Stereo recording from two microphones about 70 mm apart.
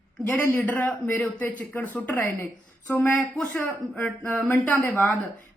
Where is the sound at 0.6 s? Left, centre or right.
Left.